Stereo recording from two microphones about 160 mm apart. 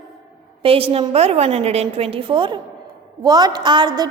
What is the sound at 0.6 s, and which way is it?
A woman's voice, 35° right (ahead or behind).